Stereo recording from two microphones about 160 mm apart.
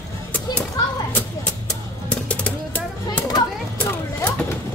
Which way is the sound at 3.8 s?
10° left (ahead or behind).